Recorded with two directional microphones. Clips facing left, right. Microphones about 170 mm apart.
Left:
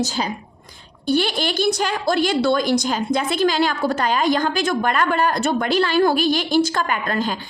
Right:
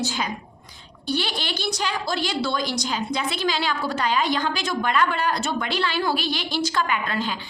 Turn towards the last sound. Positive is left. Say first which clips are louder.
# left 3 dB
turn(degrees=45)  # may be behind; listen again after turning